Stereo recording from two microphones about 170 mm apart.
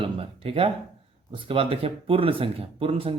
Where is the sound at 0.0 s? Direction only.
35° right (ahead or behind).